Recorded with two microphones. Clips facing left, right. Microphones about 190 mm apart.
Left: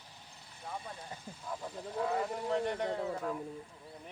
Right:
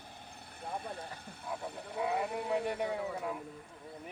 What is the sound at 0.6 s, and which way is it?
Speech, 60° right (ahead or behind).